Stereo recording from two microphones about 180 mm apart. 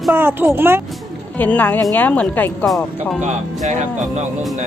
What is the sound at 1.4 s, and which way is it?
Speech, 10° left (ahead or behind).